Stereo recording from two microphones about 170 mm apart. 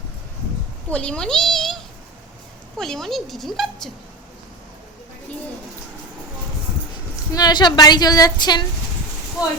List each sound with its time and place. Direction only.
0.9 s speech: 5° left (ahead or behind)
7.3 s a woman's voice: 25° left (ahead or behind)